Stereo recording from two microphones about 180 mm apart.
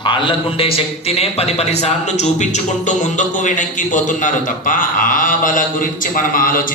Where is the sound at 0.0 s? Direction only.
25° left (ahead or behind).